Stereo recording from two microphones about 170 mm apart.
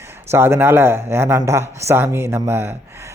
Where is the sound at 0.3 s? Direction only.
15° right (ahead or behind).